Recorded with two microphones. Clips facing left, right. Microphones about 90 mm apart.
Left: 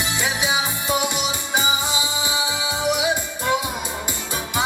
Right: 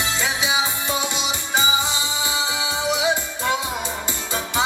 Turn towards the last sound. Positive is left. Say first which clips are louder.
# left 1 dB
turn(degrees=15)  # may be behind; listen again after turning